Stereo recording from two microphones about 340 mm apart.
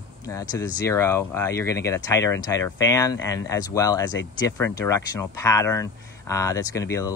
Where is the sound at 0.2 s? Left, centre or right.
Centre.